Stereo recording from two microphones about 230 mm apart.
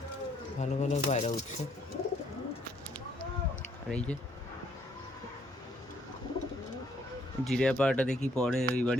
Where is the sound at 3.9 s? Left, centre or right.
Centre.